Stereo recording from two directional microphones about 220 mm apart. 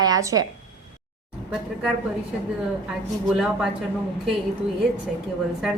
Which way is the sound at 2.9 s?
5° right (ahead or behind).